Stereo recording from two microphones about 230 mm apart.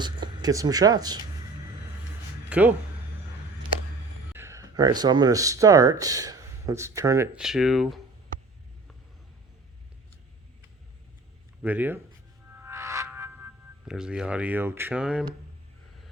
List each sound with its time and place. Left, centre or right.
0.0 s speech: centre
2.5 s speech: centre
4.4 s speech: centre
7.3 s speech: centre
11.6 s speech: centre
12.5 s music: centre